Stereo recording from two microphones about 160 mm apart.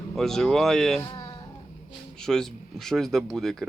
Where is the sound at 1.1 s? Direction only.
30° left (ahead or behind).